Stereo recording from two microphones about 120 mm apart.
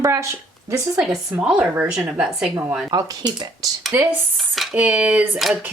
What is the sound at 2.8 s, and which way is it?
Speech, 35° right (ahead or behind).